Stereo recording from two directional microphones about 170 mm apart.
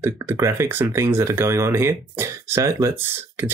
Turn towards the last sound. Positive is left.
turn(degrees=-15)  # may be behind; listen again after turning